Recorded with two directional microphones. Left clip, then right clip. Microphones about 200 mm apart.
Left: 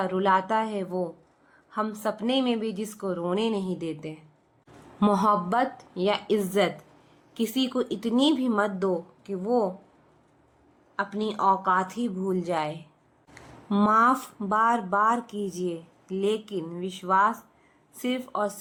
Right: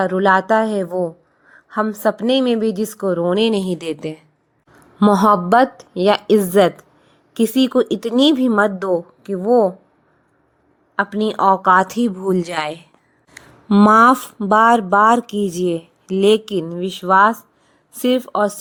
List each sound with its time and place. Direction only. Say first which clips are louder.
0.0 s a woman's voice: right 9 dB; 35° right (ahead or behind)
5.2 s a woman's voice: right 12 dB; 40° right (ahead or behind)
10.9 s a woman's voice: right 10 dB; 40° right (ahead or behind)